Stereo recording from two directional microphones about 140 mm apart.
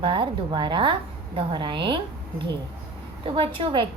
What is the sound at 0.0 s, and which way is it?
A woman's voice, 35° right (ahead or behind).